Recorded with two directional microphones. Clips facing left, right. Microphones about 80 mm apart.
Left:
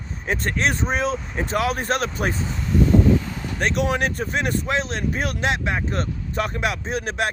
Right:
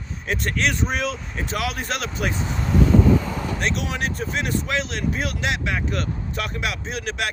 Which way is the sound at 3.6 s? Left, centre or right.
Left.